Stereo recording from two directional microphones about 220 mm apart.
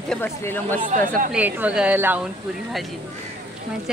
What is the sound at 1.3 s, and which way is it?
Speech, 5° right (ahead or behind).